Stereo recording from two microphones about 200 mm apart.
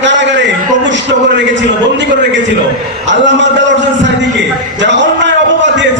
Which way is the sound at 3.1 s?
65° right (ahead or behind).